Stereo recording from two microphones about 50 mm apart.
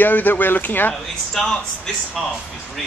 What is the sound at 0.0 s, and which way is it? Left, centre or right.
Speech, left.